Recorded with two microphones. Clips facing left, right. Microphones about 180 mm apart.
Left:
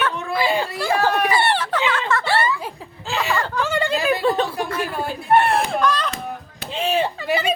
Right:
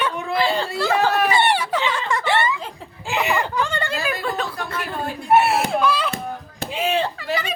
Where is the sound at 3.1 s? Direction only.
15° right (ahead or behind).